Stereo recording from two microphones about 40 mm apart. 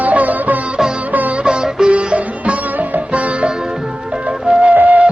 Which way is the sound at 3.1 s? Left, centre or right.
Right.